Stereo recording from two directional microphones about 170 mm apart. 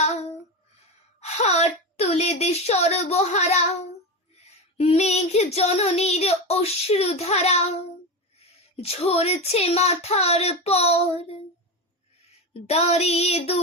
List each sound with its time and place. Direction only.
1.2 s a woman's voice: 40° left (ahead or behind)
4.8 s child singing: 40° left (ahead or behind)
8.7 s child singing: 35° left (ahead or behind)
12.5 s child singing: 35° left (ahead or behind)